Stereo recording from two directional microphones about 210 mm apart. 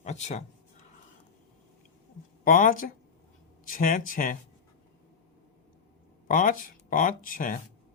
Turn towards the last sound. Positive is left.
turn(degrees=40)  # may be behind; listen again after turning